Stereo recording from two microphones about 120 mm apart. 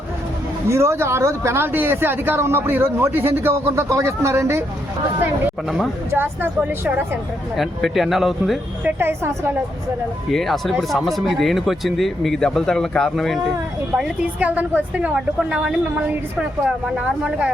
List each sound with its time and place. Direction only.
0.7 s speech: 25° right (ahead or behind)
6.1 s speech: 20° right (ahead or behind)
7.5 s speech: centre (ahead or behind)
9.0 s speech: 20° right (ahead or behind)
10.3 s speech: centre (ahead or behind)
13.9 s a woman's voice: 10° right (ahead or behind)